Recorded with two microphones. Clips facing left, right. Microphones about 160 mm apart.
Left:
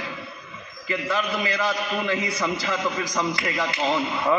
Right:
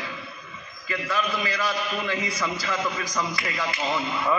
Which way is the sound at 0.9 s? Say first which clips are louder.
Left 2 dB; 25° left (ahead or behind).